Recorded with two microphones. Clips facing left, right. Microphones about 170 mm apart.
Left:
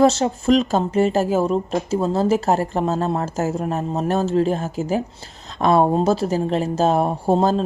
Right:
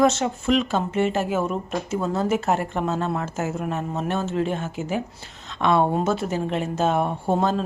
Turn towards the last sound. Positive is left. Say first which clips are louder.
# left 4 dB
turn(degrees=30)  # may be behind; listen again after turning